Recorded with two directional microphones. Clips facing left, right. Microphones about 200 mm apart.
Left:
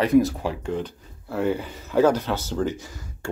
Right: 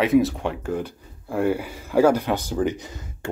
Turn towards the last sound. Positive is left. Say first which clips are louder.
# right 2 dB
turn(degrees=-20)  # may be behind; listen again after turning